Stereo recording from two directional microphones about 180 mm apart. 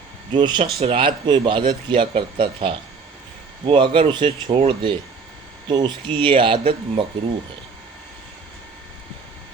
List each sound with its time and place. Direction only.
0.3 s speech: 25° right (ahead or behind)